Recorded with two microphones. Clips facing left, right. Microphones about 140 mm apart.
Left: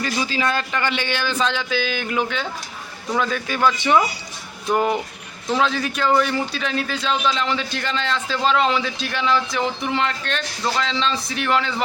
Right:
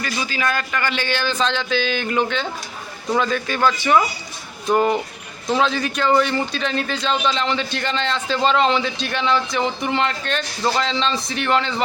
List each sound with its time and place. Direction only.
0.0 s a man's voice: 30° left (ahead or behind); by 3.8 s 10° left (ahead or behind)
3.8 s speech: 20° left (ahead or behind)
4.7 s a man's voice: 10° left (ahead or behind)